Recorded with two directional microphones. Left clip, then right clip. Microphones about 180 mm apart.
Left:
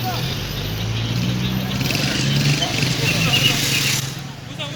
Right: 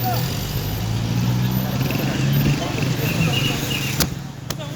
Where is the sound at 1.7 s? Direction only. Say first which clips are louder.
Left 5 dB; 45° right (ahead or behind).